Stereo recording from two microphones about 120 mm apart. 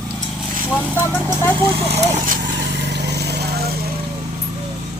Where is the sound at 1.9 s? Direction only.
65° right (ahead or behind).